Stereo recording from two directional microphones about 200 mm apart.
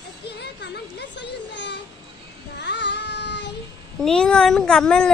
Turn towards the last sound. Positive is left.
turn(degrees=5)  # may be behind; listen again after turning